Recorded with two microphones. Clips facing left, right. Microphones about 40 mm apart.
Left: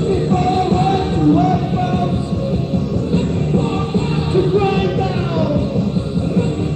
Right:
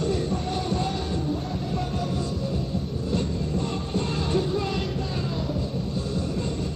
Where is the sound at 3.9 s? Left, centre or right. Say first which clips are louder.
Left 7 dB; left.